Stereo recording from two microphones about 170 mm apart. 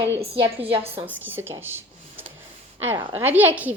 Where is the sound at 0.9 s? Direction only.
10° right (ahead or behind).